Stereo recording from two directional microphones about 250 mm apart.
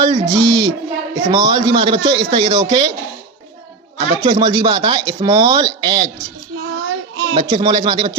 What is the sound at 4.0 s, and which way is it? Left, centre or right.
A man's voice, right.